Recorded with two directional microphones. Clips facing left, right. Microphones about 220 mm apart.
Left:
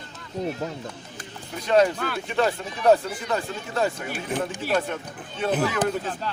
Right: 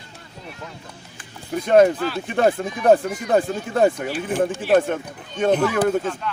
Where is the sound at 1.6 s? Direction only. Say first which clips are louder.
Right 5 dB; 50° right (ahead or behind).